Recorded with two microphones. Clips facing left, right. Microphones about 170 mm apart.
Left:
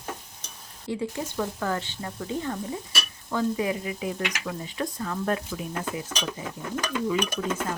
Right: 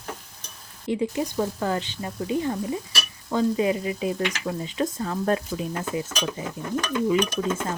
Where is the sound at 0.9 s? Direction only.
15° right (ahead or behind).